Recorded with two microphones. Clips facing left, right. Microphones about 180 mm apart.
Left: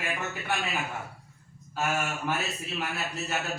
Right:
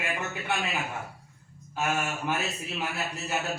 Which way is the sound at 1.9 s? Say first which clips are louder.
Right 1 dB; 15° right (ahead or behind).